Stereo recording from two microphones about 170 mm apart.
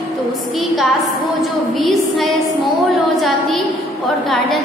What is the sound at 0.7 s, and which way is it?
A woman's voice, centre (ahead or behind).